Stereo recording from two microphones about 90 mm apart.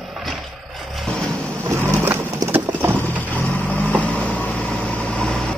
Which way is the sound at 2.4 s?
25° right (ahead or behind).